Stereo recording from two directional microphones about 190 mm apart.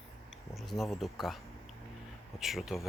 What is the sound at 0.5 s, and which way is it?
Speech, centre (ahead or behind).